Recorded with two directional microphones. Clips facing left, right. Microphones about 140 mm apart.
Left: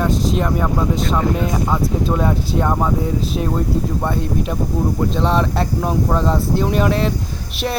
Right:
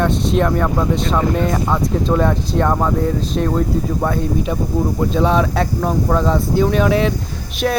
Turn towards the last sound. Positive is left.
turn(degrees=5)  # may be behind; listen again after turning